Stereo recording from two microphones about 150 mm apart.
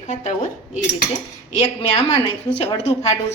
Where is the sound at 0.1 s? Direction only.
55° left (ahead or behind).